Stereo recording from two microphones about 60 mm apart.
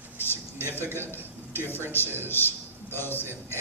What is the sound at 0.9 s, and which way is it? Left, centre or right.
A man's voice, left.